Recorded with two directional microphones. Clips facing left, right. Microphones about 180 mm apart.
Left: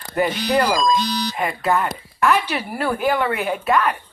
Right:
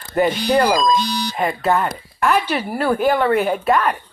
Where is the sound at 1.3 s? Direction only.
30° right (ahead or behind).